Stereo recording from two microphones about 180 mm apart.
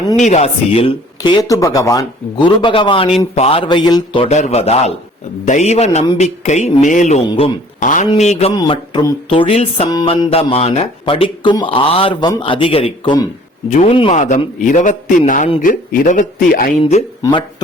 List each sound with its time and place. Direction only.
0.2 s speech: 40° left (ahead or behind)
8.5 s a man's voice: 25° left (ahead or behind); by 16.7 s 50° left (ahead or behind)
16.8 s speech: 30° left (ahead or behind)